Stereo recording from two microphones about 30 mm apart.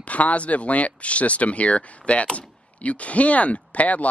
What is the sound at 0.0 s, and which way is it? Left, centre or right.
Speech, left.